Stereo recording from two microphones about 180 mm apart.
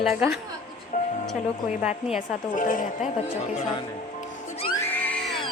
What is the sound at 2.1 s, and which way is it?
Speech, 45° left (ahead or behind).